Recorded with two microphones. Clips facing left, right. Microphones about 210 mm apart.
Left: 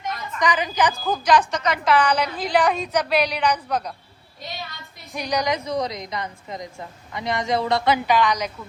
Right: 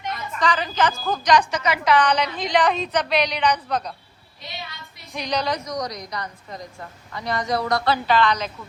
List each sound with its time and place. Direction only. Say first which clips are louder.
0.3 s a woman's voice: left 1 dB; 15° left (ahead or behind)
5.1 s a woman's voice: left 1 dB; 10° left (ahead or behind)
5.6 s a woman's voice: left 3 dB; 30° left (ahead or behind)
8.0 s a woman's voice: even; 15° left (ahead or behind)